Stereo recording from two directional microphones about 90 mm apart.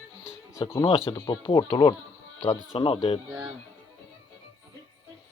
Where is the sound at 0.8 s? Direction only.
85° left.